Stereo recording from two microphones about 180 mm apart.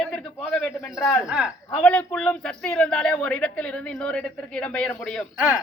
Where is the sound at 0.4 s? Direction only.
5° left (ahead or behind).